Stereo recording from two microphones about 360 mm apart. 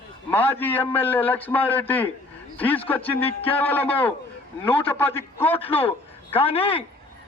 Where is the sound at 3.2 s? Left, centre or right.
Centre.